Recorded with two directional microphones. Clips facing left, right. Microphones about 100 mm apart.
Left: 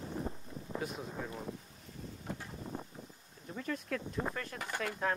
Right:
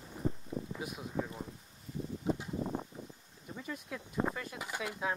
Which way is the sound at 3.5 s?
10° right (ahead or behind).